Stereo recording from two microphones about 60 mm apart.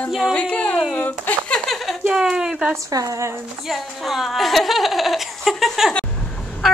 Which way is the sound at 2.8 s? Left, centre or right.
Right.